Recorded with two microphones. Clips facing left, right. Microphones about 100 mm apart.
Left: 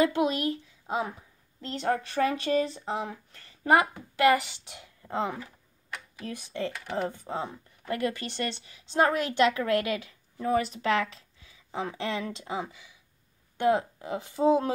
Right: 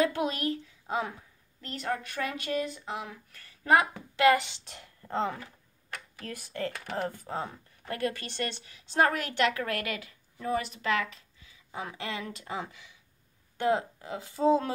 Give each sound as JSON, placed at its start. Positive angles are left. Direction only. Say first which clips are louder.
{"t": 0.0, "sound": "a woman's voice", "louder": "left 3 dB", "side_deg": 20}